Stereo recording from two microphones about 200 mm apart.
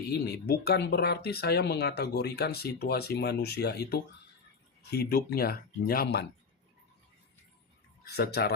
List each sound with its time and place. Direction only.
0.1 s speech: 50° left (ahead or behind)
8.1 s speech: 55° left (ahead or behind)